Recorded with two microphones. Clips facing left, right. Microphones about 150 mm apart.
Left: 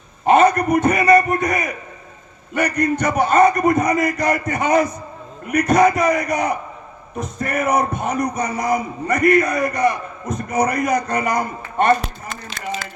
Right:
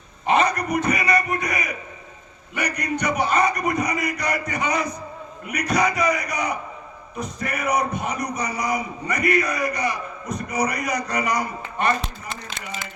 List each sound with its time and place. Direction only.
0.3 s a man's voice: 45° left (ahead or behind)